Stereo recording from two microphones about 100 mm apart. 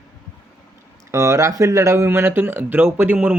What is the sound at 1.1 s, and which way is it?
Speech, 30° right (ahead or behind).